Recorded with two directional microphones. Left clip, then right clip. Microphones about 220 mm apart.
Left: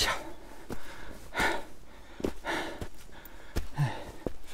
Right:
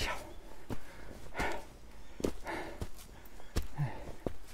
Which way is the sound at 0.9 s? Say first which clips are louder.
Left 8 dB; 50° left (ahead or behind).